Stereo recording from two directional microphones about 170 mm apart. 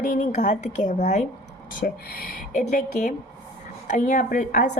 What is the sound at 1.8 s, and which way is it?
Speech, 60° left (ahead or behind).